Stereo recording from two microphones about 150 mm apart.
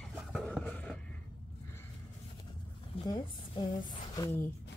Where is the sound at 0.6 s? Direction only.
10° left (ahead or behind).